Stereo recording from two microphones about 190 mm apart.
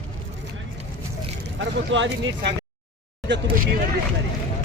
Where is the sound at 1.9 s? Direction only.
75° right (ahead or behind).